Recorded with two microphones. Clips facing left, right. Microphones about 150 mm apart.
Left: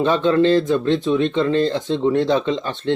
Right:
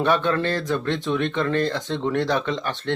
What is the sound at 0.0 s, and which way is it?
Speech, 20° left (ahead or behind).